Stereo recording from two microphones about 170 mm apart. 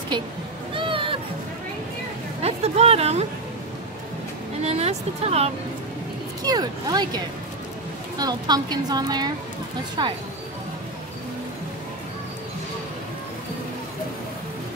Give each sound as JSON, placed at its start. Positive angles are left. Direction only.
{"t": 0.1, "sound": "a child's voice", "side_deg": -25}
{"t": 0.7, "sound": "a sound", "side_deg": -30}
{"t": 2.4, "sound": "a sound", "side_deg": -35}
{"t": 4.6, "sound": "vehicle", "side_deg": -40}
{"t": 6.4, "sound": "a child's voice", "side_deg": -25}
{"t": 8.2, "sound": "a child's voice", "side_deg": -25}